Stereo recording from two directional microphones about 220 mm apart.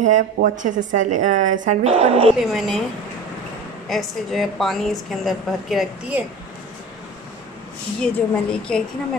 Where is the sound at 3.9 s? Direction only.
Centre (ahead or behind).